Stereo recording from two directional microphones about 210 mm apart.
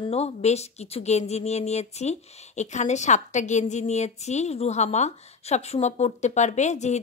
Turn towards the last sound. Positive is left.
turn(degrees=35)  # may be behind; listen again after turning